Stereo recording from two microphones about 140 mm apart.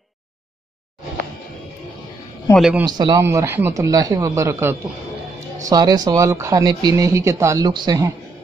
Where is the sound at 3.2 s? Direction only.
20° right (ahead or behind).